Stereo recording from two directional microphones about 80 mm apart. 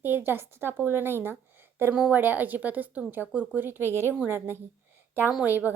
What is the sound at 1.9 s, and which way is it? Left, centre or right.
Speech, centre.